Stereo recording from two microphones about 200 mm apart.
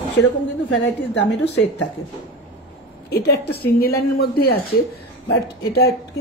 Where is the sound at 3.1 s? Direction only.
50° left (ahead or behind).